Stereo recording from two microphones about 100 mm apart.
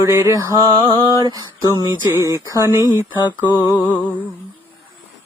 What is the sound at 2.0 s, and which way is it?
Speech, 25° right (ahead or behind).